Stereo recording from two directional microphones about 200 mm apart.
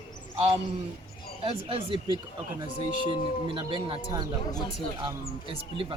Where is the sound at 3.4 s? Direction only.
25° right (ahead or behind).